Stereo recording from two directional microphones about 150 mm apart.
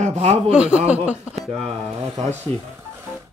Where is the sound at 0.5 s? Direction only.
5° right (ahead or behind).